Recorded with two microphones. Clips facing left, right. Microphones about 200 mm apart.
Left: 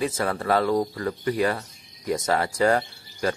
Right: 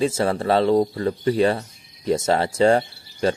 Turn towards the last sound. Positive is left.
turn(degrees=-30)  # may be behind; listen again after turning